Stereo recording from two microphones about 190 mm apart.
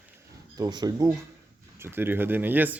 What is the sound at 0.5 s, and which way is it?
Speech, 20° right (ahead or behind).